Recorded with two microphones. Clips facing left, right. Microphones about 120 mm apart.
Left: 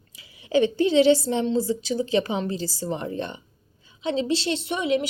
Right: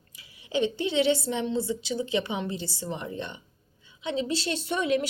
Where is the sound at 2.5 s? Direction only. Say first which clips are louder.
Left 5 dB; 90° left.